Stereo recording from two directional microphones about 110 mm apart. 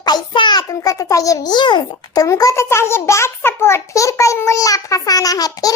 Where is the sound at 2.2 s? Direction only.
30° left (ahead or behind).